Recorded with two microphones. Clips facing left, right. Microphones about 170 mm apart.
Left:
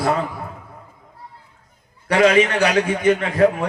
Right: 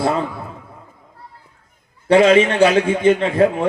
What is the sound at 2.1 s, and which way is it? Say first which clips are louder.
A man's voice: right 3 dB; 25° right (ahead or behind).